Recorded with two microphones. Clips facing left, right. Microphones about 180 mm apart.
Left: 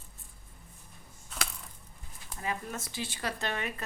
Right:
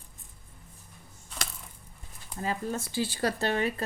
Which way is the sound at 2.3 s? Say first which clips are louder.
Right 5 dB; 35° right (ahead or behind).